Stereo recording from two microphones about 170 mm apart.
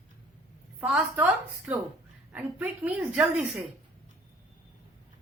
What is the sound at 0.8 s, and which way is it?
Speech, 10° right (ahead or behind).